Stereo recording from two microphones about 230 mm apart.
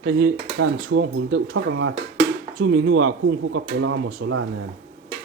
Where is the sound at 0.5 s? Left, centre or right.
Right.